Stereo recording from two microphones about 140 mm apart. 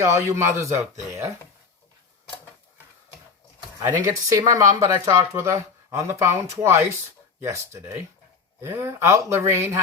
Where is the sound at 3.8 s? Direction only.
20° right (ahead or behind).